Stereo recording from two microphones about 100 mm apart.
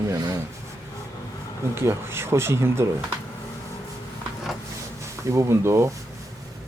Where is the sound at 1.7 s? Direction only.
25° right (ahead or behind).